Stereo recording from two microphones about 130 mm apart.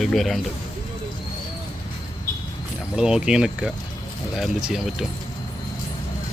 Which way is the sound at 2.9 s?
5° right (ahead or behind).